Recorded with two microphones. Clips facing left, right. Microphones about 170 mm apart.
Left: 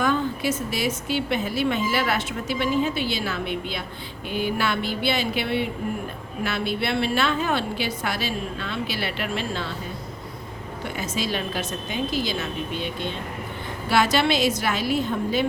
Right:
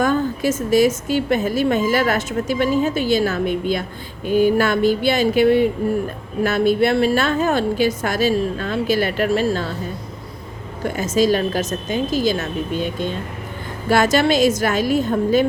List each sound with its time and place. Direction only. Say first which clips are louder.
0.0 s a woman's voice: right 5 dB; 45° right (ahead or behind)
10.8 s a woman's voice: right 11 dB; 45° right (ahead or behind)